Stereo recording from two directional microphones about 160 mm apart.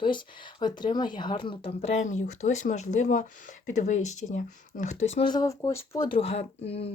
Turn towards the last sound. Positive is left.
turn(degrees=40)  # may be behind; listen again after turning